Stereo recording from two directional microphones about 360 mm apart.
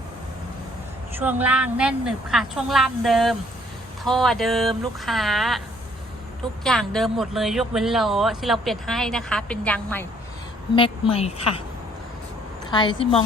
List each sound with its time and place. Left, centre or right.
1.1 s speech: centre
6.7 s speech: centre
10.8 s a woman's voice: centre
12.7 s a woman's voice: centre